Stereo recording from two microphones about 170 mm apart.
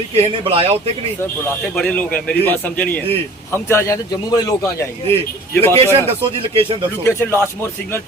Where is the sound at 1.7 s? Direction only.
5° left (ahead or behind).